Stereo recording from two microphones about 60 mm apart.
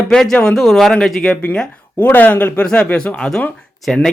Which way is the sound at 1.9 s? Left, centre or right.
Left.